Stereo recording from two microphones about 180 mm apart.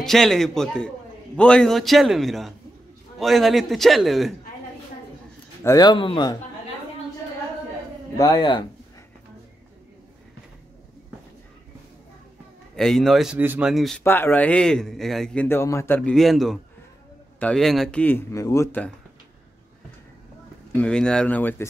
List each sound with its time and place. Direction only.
0.0 s a man's voice: centre (ahead or behind)
5.6 s speech: 20° left (ahead or behind)
8.2 s speech: 20° left (ahead or behind)
12.7 s a man's voice: centre (ahead or behind)
14.0 s a man's voice: 10° left (ahead or behind)
16.0 s a man's voice: centre (ahead or behind)
20.7 s a man's voice: 5° left (ahead or behind)